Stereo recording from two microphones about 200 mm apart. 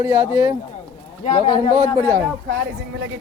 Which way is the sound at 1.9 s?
10° right (ahead or behind).